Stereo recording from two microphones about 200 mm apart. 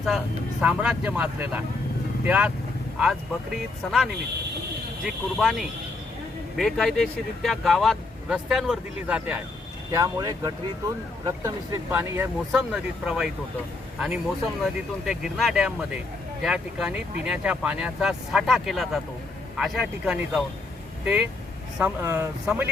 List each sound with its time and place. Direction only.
0.6 s speech: 5° right (ahead or behind)
9.9 s speech: 15° right (ahead or behind)
15.0 s speech: centre (ahead or behind)